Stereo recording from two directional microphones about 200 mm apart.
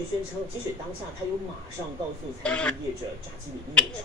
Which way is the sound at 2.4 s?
5° left (ahead or behind).